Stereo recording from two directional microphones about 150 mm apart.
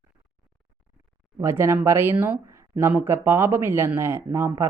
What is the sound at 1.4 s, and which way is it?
Speech, 15° right (ahead or behind).